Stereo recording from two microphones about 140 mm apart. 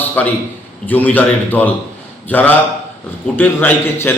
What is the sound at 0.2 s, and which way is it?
A man's voice, 10° left (ahead or behind).